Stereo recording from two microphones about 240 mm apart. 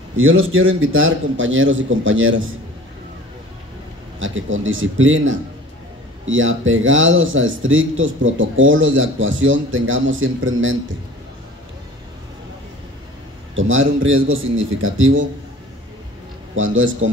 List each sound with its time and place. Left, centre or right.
0.2 s speech: right
4.2 s speech: right
13.6 s a man's voice: right
16.5 s speech: right